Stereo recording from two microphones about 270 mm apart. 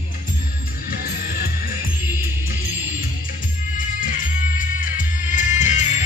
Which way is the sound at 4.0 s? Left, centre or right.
Left.